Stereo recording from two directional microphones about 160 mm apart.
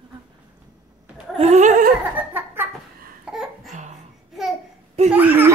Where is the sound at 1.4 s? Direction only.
45° right (ahead or behind).